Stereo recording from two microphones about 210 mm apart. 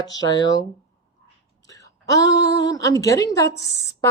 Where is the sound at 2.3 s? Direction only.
15° left (ahead or behind).